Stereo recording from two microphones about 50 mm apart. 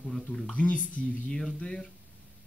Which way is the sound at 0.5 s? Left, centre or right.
Left.